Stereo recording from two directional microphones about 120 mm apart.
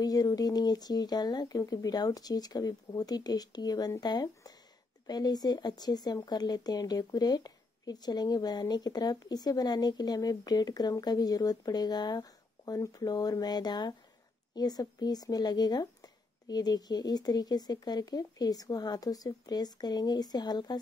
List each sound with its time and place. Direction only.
0.0 s speech: 30° left (ahead or behind)